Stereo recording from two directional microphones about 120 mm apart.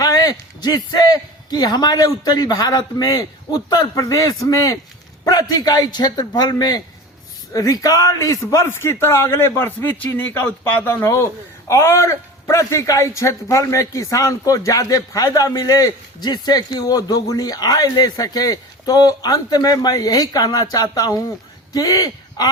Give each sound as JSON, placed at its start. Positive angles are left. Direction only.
{"t": 0.0, "sound": "a man's voice", "side_deg": 30}